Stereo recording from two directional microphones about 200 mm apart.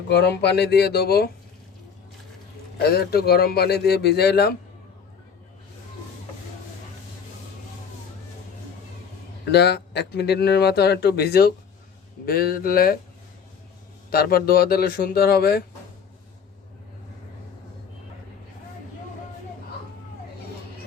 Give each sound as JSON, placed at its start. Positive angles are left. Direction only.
{"t": 0.1, "sound": "speech", "side_deg": 55}
{"t": 2.7, "sound": "speech", "side_deg": 50}
{"t": 9.5, "sound": "speech", "side_deg": 55}
{"t": 14.1, "sound": "speech", "side_deg": 50}